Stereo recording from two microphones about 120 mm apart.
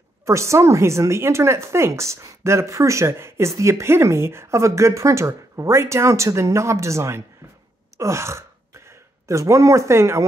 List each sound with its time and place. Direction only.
0.2 s speech: 25° right (ahead or behind)